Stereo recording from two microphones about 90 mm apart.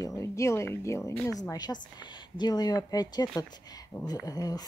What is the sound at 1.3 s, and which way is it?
Speech, 45° left (ahead or behind).